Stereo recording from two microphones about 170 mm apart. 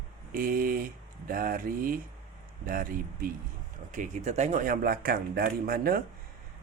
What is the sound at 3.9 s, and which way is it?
Speech, 45° right (ahead or behind).